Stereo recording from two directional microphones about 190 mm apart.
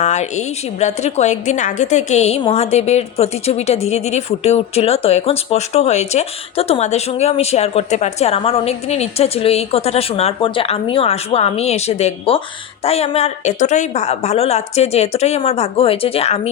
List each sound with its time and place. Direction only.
0.0 s a woman's voice: 35° left (ahead or behind)